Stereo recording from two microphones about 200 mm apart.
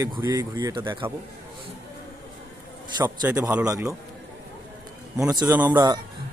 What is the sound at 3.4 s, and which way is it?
Speech, 15° right (ahead or behind).